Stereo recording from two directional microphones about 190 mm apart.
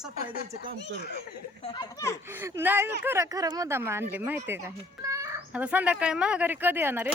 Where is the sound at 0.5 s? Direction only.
45° right (ahead or behind).